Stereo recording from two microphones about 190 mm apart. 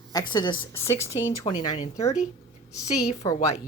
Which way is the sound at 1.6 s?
35° left (ahead or behind).